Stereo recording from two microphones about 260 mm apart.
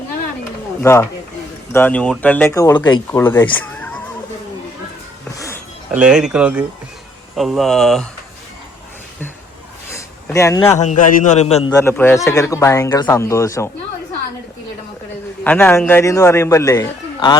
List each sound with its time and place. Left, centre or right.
0.8 s speech: centre
5.3 s a sound: centre
5.9 s speech: centre
9.9 s a sound: centre
11.1 s a man's voice: left
11.7 s speech: centre
15.4 s speech: centre